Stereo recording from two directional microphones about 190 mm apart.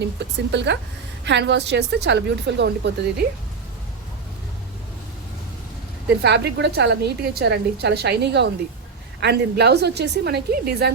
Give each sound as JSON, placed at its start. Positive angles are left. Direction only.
{"t": 0.0, "sound": "a woman's voice", "side_deg": -65}
{"t": 6.2, "sound": "a woman's voice", "side_deg": -60}